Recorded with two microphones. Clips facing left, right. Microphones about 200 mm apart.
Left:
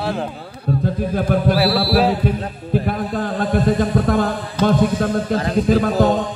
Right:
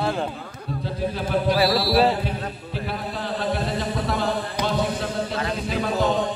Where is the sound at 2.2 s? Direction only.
50° left (ahead or behind).